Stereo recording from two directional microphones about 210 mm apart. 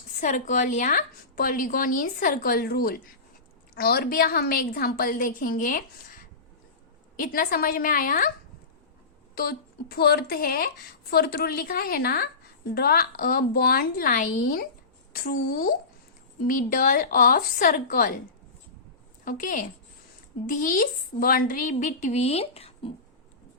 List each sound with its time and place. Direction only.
0.2 s a woman's voice: 35° left (ahead or behind)
7.2 s a woman's voice: 45° left (ahead or behind)
9.3 s a woman's voice: 45° left (ahead or behind)
19.2 s a woman's voice: 40° left (ahead or behind)